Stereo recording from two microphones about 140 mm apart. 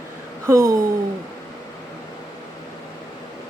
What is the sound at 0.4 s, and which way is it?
Speech, 20° right (ahead or behind).